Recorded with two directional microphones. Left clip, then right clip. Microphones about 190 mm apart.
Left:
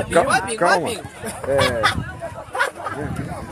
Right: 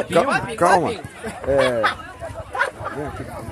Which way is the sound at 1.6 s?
45° left (ahead or behind).